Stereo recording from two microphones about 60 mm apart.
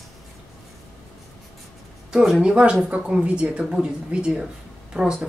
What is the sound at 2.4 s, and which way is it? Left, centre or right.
Speech, centre.